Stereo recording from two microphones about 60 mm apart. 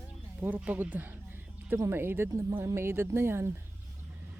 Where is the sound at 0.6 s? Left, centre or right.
Right.